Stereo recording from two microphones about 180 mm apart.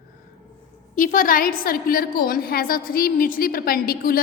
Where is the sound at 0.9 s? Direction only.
50° left (ahead or behind).